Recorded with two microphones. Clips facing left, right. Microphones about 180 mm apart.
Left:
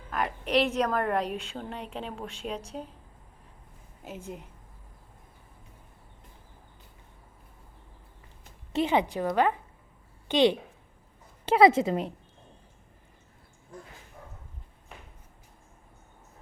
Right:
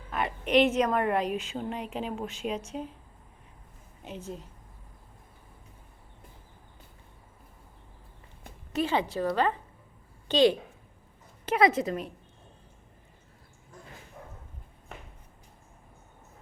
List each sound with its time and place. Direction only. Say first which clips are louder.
0.1 s a sound: left 1 dB; centre (ahead or behind)
0.5 s a woman's voice: right 3 dB; 5° right (ahead or behind)
8.7 s a woman's voice: left 2 dB; 20° left (ahead or behind)